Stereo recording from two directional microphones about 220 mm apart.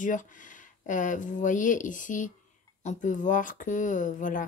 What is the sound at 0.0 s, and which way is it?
Speech, 35° left (ahead or behind).